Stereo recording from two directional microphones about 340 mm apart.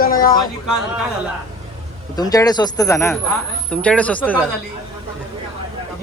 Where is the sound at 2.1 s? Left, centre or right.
Centre.